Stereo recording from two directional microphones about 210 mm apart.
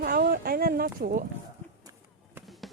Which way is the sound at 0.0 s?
45° right (ahead or behind).